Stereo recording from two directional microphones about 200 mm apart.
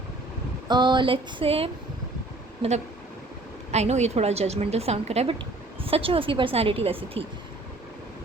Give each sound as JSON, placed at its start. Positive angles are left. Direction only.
{"t": 0.7, "sound": "a woman's voice", "side_deg": -20}